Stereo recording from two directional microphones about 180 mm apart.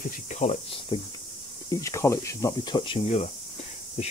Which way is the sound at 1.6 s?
15° left (ahead or behind).